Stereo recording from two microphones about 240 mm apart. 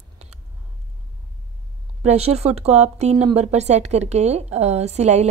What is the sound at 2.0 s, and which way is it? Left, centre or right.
Speech, right.